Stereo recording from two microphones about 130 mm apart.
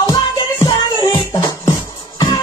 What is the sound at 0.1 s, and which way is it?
Music, 30° left (ahead or behind).